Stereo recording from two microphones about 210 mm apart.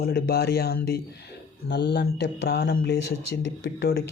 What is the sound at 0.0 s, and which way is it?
Speech, 45° left (ahead or behind).